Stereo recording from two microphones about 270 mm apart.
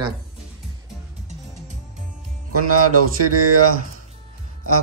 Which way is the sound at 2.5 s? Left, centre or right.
Right.